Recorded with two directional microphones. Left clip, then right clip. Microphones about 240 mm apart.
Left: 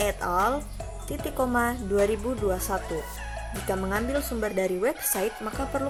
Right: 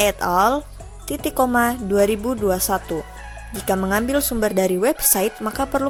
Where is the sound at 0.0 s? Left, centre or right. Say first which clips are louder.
Right 8 dB; right.